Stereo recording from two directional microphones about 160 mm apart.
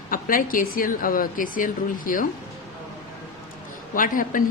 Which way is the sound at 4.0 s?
55° left (ahead or behind).